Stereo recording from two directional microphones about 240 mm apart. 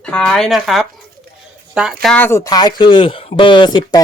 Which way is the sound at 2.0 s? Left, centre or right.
Centre.